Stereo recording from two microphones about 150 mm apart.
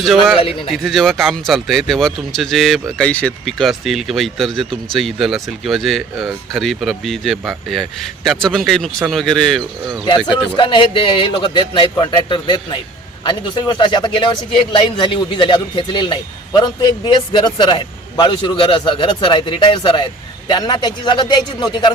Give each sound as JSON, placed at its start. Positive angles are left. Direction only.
{"t": 0.0, "sound": "speech", "side_deg": 0}
{"t": 0.3, "sound": "speech", "side_deg": 35}
{"t": 0.7, "sound": "speech", "side_deg": 0}
{"t": 10.3, "sound": "speech", "side_deg": 30}